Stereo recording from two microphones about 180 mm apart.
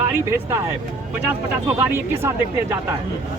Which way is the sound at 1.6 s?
15° right (ahead or behind).